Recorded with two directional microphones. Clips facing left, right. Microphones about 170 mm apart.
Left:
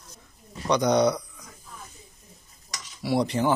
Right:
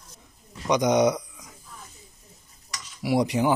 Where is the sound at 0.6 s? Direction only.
15° right (ahead or behind).